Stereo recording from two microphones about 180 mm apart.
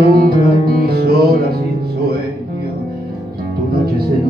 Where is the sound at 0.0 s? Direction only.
60° right (ahead or behind).